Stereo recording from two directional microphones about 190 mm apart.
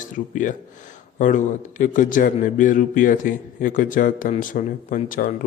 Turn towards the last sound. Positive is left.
turn(degrees=45)  # may be behind; listen again after turning